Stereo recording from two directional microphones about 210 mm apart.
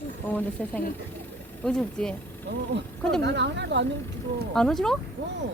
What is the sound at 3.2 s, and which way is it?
Speech, 55° right (ahead or behind).